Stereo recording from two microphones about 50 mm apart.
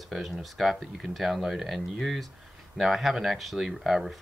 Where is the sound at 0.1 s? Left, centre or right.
Centre.